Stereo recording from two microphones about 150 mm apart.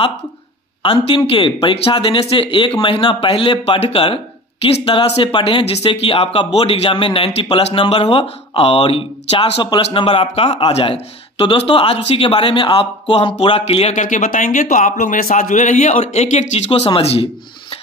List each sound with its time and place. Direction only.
1.3 s speech: 35° left (ahead or behind); by 16.0 s 60° left (ahead or behind)
16.0 s speech: 45° left (ahead or behind)